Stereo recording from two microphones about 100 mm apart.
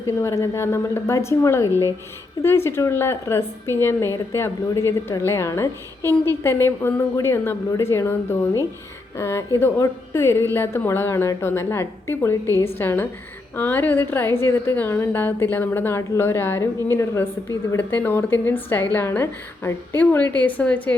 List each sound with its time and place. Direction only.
0.2 s a woman's voice: 30° left (ahead or behind)